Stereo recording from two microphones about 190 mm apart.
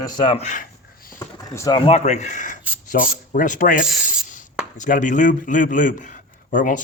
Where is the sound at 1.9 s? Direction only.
35° left (ahead or behind).